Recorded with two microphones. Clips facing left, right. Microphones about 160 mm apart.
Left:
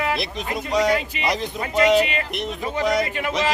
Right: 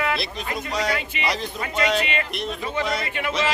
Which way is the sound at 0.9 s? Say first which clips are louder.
Left 4 dB; 40° left (ahead or behind).